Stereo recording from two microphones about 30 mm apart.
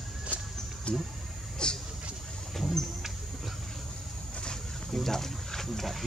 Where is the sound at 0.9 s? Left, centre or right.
Left.